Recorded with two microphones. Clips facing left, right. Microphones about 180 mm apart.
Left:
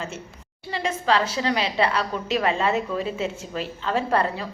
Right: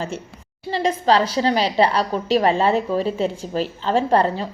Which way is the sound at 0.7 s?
35° right (ahead or behind).